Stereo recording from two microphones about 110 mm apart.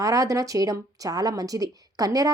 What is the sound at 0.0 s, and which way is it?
A woman's voice, 30° right (ahead or behind).